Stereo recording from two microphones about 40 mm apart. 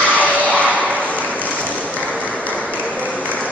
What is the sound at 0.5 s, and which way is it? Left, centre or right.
Applause, left.